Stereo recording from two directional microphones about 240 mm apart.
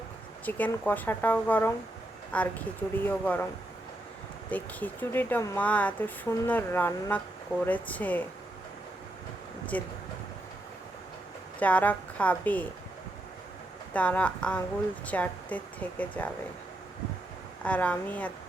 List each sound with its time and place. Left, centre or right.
0.4 s speech: centre
4.4 s speech: centre
9.7 s speech: centre
11.6 s speech: centre
13.9 s speech: centre
17.6 s speech: centre